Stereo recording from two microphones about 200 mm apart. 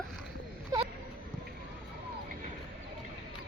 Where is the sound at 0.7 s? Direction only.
15° right (ahead or behind).